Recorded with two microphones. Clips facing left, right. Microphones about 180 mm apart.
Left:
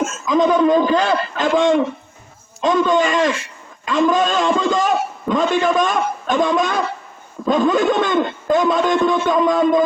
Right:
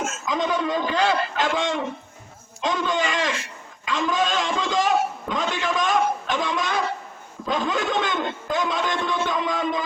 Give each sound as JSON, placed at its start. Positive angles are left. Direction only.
{"t": 0.3, "sound": "a man's voice", "side_deg": 50}